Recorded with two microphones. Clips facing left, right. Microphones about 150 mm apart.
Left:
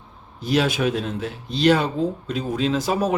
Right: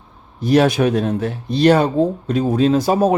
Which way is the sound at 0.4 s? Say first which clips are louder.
Right 7 dB; 50° right (ahead or behind).